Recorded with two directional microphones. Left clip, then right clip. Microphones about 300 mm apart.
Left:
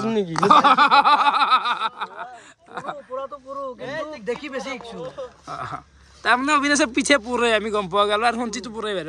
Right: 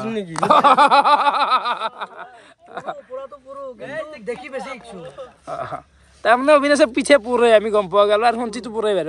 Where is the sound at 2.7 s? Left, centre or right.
Centre.